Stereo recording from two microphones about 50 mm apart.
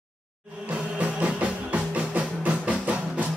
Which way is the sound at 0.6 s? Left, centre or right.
Right.